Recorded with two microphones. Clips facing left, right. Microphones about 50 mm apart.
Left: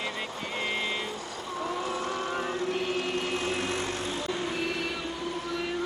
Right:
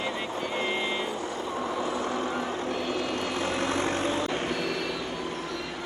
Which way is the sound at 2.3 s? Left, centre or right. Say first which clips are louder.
Even; left.